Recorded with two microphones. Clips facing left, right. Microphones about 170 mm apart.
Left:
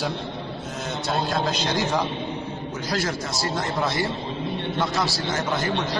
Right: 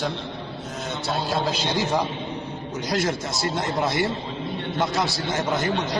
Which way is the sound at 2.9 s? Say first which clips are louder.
Right 2 dB; 20° right (ahead or behind).